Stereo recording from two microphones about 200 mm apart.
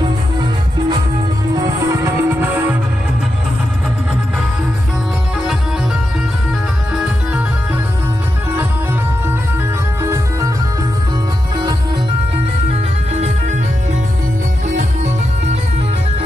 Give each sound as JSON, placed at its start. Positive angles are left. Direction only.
{"t": 1.5, "sound": "music", "side_deg": -15}
{"t": 10.0, "sound": "music", "side_deg": -15}
{"t": 13.1, "sound": "music", "side_deg": -35}